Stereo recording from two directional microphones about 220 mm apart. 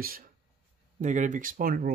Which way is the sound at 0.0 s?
40° right (ahead or behind).